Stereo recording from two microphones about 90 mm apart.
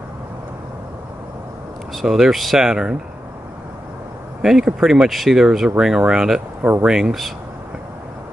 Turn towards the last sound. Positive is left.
turn(degrees=-5)  # may be behind; listen again after turning